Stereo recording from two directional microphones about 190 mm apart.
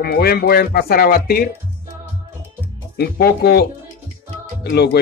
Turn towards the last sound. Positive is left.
turn(degrees=60)  # may be behind; listen again after turning